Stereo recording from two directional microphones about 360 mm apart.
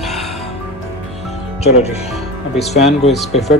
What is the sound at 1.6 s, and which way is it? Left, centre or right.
Speech, centre.